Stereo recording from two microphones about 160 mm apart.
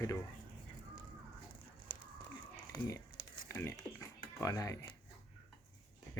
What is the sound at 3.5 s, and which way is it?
Speech, 15° left (ahead or behind).